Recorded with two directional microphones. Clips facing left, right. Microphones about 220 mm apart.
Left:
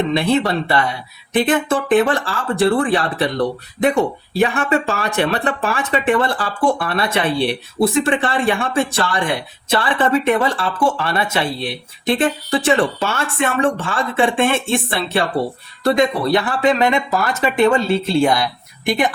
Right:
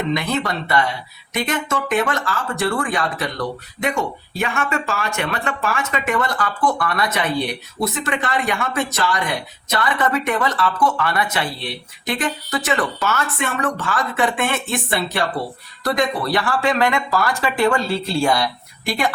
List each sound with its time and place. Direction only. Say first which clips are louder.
0.1 s speech: left 5 dB; 30° left (ahead or behind)